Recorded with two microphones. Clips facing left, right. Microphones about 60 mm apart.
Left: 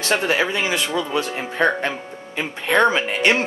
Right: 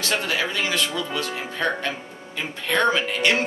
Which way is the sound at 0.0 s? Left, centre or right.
Left.